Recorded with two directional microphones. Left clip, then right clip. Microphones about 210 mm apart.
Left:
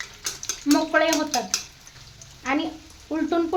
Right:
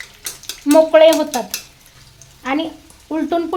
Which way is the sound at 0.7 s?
40° right (ahead or behind).